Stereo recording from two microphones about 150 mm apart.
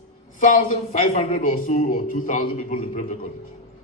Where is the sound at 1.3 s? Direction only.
60° left (ahead or behind).